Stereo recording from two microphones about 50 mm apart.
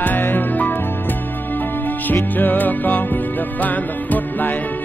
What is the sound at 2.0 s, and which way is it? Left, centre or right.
Music, left.